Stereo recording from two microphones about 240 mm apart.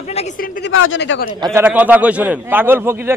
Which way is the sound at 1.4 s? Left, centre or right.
Centre.